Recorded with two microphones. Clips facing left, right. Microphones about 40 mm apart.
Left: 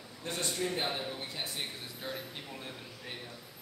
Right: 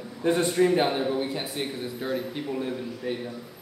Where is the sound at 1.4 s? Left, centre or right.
Centre.